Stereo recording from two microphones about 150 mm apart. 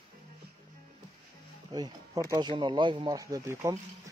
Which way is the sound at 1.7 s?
25° right (ahead or behind).